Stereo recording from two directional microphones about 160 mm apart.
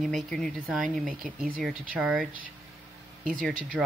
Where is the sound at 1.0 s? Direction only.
60° right (ahead or behind).